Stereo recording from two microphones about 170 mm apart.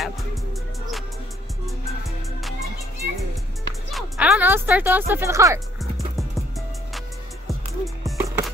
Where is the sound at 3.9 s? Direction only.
5° right (ahead or behind).